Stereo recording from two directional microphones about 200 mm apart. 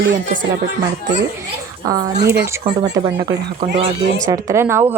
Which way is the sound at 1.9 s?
20° right (ahead or behind).